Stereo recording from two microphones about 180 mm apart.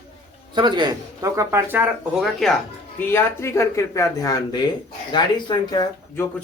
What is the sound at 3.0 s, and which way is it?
Speech, 15° left (ahead or behind).